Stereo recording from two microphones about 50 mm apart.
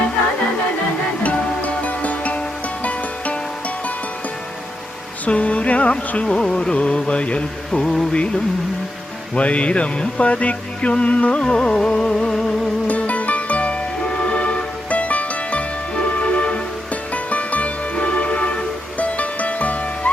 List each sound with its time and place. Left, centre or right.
1.2 s music: left
5.2 s music: left
9.3 s music: left
12.9 s music: left